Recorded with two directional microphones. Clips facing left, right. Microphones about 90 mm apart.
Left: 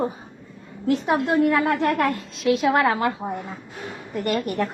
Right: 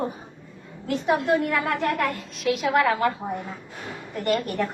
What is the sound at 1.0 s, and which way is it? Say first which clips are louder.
A woman's voice: left 1 dB; 25° left (ahead or behind).